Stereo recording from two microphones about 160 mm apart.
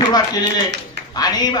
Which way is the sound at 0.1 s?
25° left (ahead or behind).